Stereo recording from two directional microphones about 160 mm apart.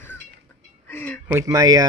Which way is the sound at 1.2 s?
15° right (ahead or behind).